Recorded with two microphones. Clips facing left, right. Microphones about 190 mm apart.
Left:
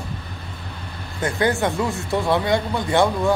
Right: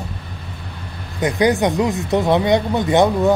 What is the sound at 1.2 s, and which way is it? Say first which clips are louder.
Speech: right 5 dB; 15° right (ahead or behind).